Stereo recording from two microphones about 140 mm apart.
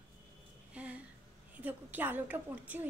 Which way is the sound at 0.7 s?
10° right (ahead or behind).